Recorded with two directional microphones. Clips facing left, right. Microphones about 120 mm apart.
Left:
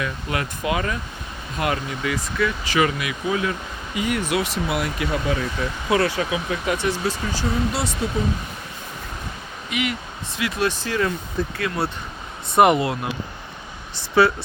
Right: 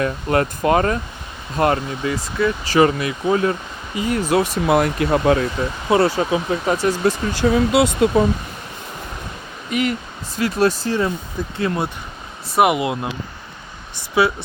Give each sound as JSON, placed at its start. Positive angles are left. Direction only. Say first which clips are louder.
{"t": 0.0, "sound": "speech", "louder": "right 8 dB", "side_deg": -45}
{"t": 5.5, "sound": "speech", "louder": "right 4 dB", "side_deg": -30}
{"t": 7.3, "sound": "speech", "louder": "right 11 dB", "side_deg": -65}
{"t": 9.6, "sound": "speech", "louder": "right 5 dB", "side_deg": -40}
{"t": 11.5, "sound": "speech", "louder": "right 6 dB", "side_deg": -25}
{"t": 12.5, "sound": "speech", "louder": "left 1 dB", "side_deg": -5}
{"t": 12.8, "sound": "speech", "louder": "right 2 dB", "side_deg": -20}